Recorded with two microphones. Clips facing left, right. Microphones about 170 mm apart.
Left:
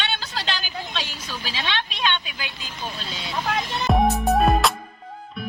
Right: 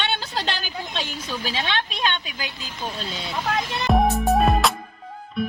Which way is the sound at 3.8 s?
Centre (ahead or behind).